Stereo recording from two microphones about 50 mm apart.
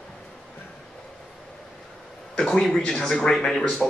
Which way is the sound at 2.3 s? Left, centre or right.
Centre.